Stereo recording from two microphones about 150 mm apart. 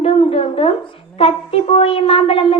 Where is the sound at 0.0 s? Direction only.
40° left (ahead or behind).